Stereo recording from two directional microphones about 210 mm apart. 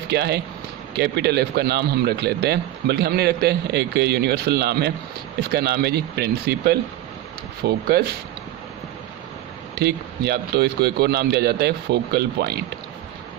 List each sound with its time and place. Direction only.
0.1 s a man's voice: 50° right (ahead or behind)
9.7 s a man's voice: 50° right (ahead or behind)